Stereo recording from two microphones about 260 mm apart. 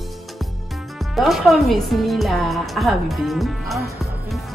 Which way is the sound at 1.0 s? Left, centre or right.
Centre.